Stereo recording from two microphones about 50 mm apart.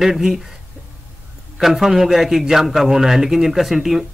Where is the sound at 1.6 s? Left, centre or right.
Centre.